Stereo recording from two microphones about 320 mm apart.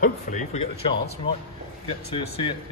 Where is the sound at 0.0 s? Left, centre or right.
Left.